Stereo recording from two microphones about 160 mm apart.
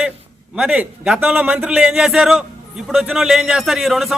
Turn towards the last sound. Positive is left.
turn(degrees=0)  # may be behind; listen again after turning